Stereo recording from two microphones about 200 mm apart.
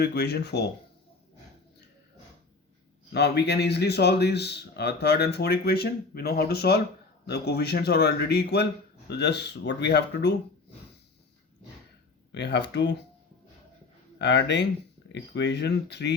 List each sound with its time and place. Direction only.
0.0 s speech: 55° left (ahead or behind)
3.1 s speech: 55° left (ahead or behind)
12.3 s speech: 60° left (ahead or behind)
14.2 s speech: 60° left (ahead or behind)